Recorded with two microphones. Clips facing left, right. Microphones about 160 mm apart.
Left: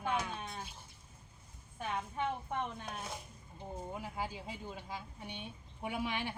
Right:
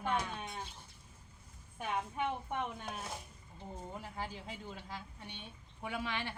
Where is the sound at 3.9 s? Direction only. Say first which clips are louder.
Left 2 dB; 10° left (ahead or behind).